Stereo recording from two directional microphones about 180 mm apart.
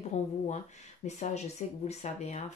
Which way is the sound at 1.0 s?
40° left (ahead or behind).